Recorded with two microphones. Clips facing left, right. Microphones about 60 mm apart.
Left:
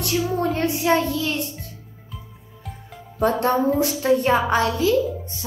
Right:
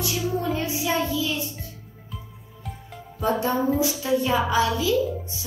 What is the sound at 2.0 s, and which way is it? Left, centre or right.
Music, centre.